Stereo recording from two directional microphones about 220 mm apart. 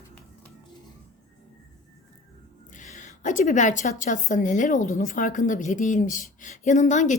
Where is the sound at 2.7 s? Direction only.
35° left (ahead or behind).